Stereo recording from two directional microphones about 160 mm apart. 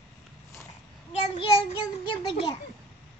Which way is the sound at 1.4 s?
35° left (ahead or behind).